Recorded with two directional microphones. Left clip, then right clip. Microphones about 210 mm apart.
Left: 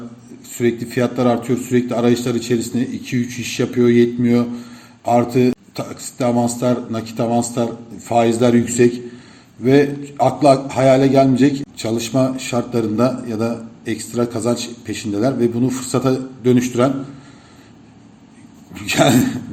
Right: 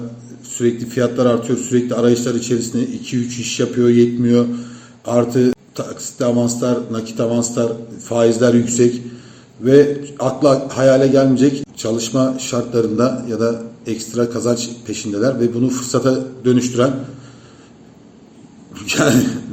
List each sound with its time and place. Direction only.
0.9 s a man's voice: 35° left (ahead or behind)
18.7 s a man's voice: 35° left (ahead or behind)